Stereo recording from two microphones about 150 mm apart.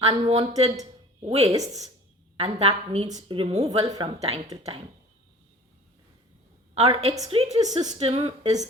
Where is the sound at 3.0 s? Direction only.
25° right (ahead or behind).